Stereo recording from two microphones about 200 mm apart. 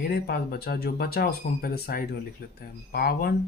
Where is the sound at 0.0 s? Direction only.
50° left (ahead or behind).